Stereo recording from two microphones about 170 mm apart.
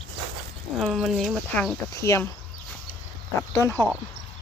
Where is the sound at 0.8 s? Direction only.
Centre (ahead or behind).